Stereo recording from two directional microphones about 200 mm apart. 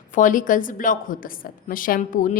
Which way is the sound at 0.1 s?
40° left (ahead or behind).